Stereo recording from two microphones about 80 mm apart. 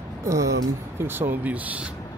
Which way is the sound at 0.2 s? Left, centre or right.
Right.